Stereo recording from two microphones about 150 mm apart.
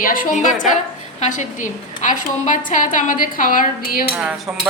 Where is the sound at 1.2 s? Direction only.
55° left (ahead or behind); by 4.0 s 70° left (ahead or behind).